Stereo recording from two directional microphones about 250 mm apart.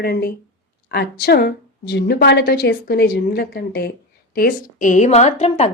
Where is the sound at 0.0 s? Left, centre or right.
Left.